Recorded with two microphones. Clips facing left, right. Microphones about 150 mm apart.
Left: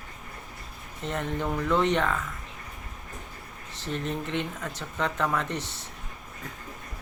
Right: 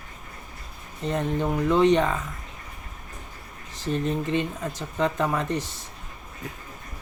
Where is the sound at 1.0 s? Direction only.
15° right (ahead or behind).